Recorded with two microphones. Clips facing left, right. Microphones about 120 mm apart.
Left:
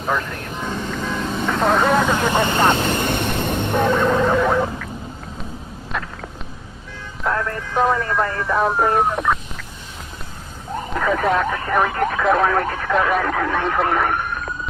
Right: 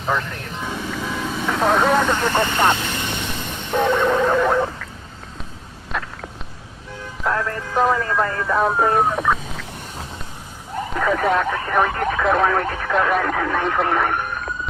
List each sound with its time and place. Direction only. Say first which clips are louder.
0.0 s speech: even; centre (ahead or behind)
3.0 s vehicle: left 6 dB; 55° left (ahead or behind)
3.7 s speech: right 1 dB; centre (ahead or behind)
7.2 s speech: even; centre (ahead or behind)
10.9 s speech: even; centre (ahead or behind)